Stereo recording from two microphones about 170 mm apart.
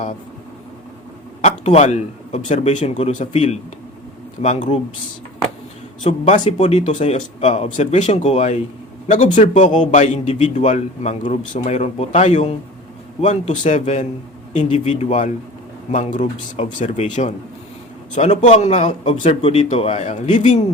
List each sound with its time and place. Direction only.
1.4 s a man's voice: 40° left (ahead or behind)
6.0 s a man's voice: 45° left (ahead or behind)
19.0 s speech: 30° left (ahead or behind)